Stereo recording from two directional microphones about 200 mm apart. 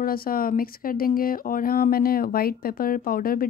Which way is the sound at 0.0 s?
45° left (ahead or behind).